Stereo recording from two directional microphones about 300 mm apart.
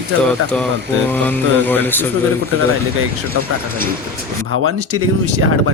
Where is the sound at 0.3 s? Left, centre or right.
Centre.